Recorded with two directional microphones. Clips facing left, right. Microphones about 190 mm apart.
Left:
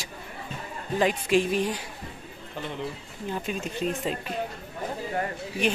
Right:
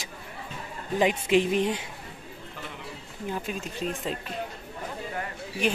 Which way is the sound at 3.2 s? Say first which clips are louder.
Left 1 dB; centre (ahead or behind).